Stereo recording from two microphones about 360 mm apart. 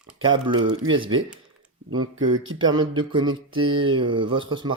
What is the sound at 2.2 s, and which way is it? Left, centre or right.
Speech, right.